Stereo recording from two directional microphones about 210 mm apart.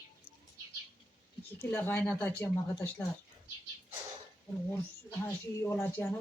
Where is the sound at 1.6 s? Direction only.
10° left (ahead or behind).